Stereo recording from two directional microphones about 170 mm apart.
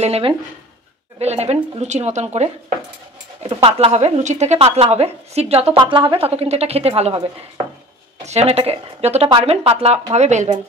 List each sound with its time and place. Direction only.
0.0 s speech: 35° right (ahead or behind)
3.4 s speech: 30° right (ahead or behind)
8.3 s speech: 40° right (ahead or behind)